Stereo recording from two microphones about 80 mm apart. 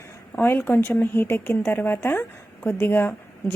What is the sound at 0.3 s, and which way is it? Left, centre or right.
A woman's voice, left.